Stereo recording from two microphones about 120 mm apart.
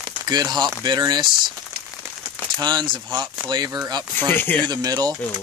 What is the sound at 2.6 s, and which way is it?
Speech, 40° right (ahead or behind).